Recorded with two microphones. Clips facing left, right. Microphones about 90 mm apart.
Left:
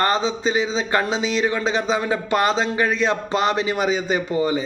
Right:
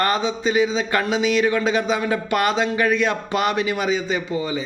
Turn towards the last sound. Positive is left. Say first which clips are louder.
# left 3 dB
turn(degrees=35)  # may be behind; listen again after turning